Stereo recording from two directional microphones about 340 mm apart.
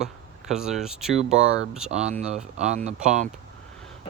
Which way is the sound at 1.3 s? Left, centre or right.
Right.